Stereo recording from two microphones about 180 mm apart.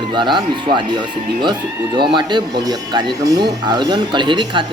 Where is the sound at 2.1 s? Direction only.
25° right (ahead or behind).